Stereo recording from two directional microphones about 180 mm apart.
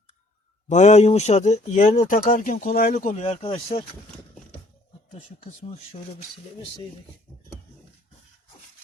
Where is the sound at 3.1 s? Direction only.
35° left (ahead or behind).